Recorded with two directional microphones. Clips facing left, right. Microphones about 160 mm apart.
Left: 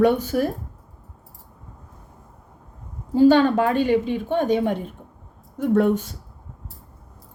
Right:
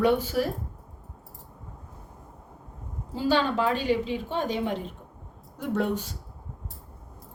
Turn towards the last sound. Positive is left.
turn(degrees=50)  # may be behind; listen again after turning